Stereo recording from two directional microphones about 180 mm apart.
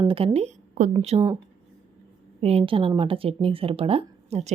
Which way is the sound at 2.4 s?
30° right (ahead or behind).